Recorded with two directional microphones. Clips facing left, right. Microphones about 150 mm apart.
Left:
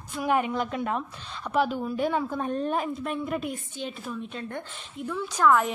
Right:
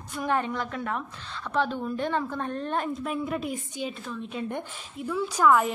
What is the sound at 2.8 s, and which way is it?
Speech, centre (ahead or behind).